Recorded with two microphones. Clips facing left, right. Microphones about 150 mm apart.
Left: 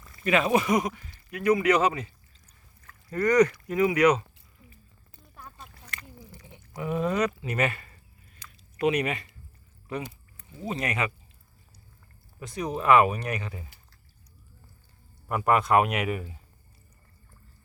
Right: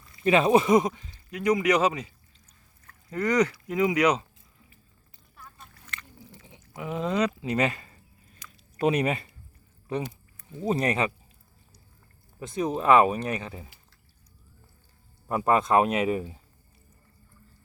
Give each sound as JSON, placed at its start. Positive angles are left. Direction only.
{"t": 0.3, "sound": "speech", "side_deg": -30}
{"t": 5.4, "sound": "rowboat", "side_deg": 35}
{"t": 6.7, "sound": "speech", "side_deg": -15}
{"t": 8.8, "sound": "speech", "side_deg": -30}
{"t": 10.6, "sound": "speech", "side_deg": -35}
{"t": 12.4, "sound": "speech", "side_deg": -25}
{"t": 15.3, "sound": "speech", "side_deg": -25}